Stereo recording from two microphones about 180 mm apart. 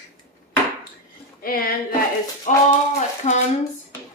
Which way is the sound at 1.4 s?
55° left (ahead or behind).